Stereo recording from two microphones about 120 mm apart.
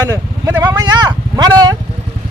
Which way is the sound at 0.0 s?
30° right (ahead or behind).